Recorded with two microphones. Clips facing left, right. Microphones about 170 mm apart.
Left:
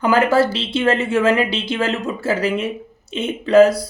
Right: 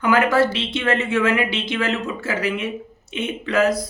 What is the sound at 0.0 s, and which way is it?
A woman's voice, 30° left (ahead or behind).